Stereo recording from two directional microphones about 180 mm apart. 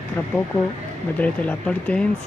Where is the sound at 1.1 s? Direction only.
10° left (ahead or behind).